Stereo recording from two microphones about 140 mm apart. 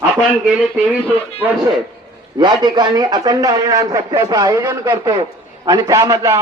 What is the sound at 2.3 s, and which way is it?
A man's voice, 30° right (ahead or behind).